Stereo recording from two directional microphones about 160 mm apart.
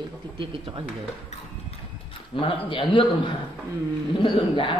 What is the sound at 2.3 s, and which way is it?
Speech, 30° left (ahead or behind).